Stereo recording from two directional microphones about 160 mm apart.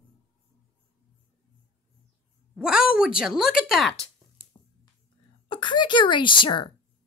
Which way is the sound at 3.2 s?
5° right (ahead or behind).